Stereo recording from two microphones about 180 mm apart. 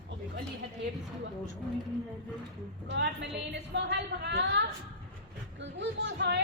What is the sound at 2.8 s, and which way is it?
A woman's voice, 70° right (ahead or behind).